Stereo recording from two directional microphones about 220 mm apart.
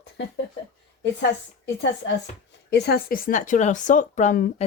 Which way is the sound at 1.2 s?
55° left (ahead or behind).